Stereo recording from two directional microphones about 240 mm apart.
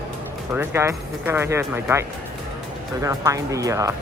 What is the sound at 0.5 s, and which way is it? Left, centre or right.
Speech, centre.